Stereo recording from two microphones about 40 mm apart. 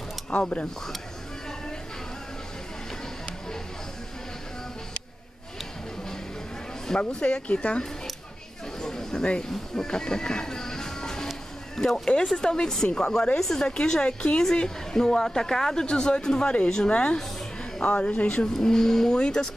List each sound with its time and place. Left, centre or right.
0.3 s speech: left
7.0 s speech: left
8.8 s chatter: centre
9.5 s music: centre
11.7 s a woman's voice: centre; by 18.4 s left
18.6 s a woman's voice: centre